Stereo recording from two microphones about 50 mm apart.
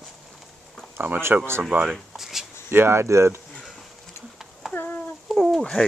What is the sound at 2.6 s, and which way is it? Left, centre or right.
Speech, right.